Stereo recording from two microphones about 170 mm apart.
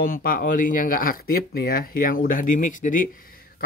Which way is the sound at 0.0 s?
60° left (ahead or behind).